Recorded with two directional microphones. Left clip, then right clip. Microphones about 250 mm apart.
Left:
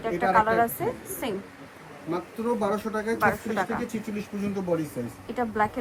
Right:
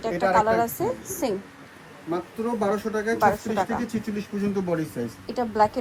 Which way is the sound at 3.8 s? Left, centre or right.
Centre.